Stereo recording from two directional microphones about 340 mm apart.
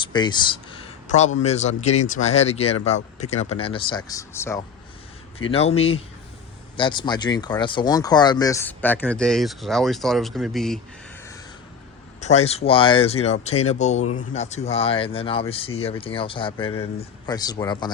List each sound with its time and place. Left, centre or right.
0.0 s a sound: centre
1.4 s speech: centre
12.2 s speech: centre